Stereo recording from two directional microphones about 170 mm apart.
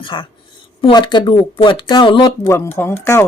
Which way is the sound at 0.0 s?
30° left (ahead or behind).